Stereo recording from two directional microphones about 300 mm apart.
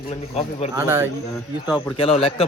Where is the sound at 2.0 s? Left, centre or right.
Centre.